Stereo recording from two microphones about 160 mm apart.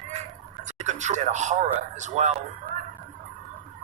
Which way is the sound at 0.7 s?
50° right (ahead or behind).